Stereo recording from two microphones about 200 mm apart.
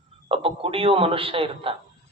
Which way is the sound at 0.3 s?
25° right (ahead or behind).